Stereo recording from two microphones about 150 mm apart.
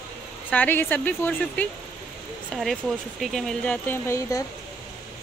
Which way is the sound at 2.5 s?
Centre (ahead or behind).